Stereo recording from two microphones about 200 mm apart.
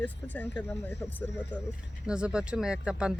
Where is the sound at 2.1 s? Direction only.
5° right (ahead or behind).